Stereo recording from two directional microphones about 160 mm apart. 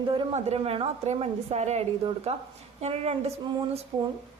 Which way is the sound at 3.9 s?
25° right (ahead or behind).